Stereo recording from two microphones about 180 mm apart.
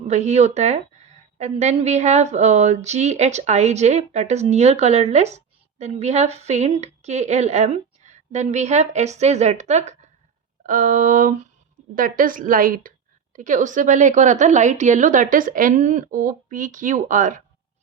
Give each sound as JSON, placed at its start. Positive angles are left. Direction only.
{"t": 0.1, "sound": "a woman's voice", "side_deg": -40}